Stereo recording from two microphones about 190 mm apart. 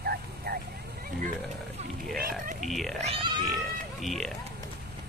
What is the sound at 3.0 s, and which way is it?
Cat, 30° right (ahead or behind).